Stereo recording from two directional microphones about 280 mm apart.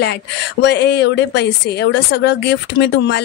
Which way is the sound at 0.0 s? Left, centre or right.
Left.